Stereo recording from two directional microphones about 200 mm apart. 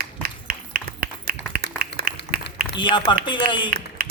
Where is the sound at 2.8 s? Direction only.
25° left (ahead or behind).